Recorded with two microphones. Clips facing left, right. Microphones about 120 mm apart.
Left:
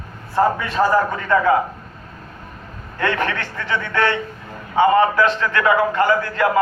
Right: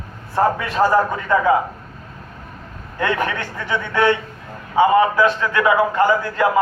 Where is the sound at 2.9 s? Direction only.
15° right (ahead or behind).